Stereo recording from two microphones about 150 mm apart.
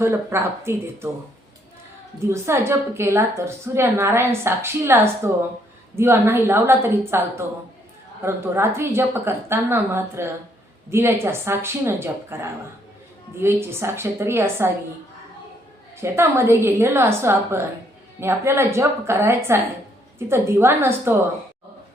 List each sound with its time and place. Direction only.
0.0 s a woman's voice: 15° right (ahead or behind)
2.1 s a woman's voice: 20° right (ahead or behind)
16.0 s a woman's voice: 15° right (ahead or behind)